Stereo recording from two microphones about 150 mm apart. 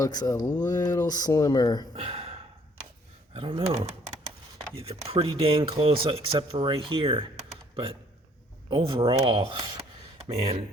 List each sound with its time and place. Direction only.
0.0 s speech: 25° left (ahead or behind)
2.0 s gasp: 40° right (ahead or behind)
3.3 s speech: 35° right (ahead or behind)
4.8 s speech: 40° right (ahead or behind)
8.7 s speech: 40° right (ahead or behind)
9.2 s speech: 25° right (ahead or behind)
10.2 s speech: 40° right (ahead or behind)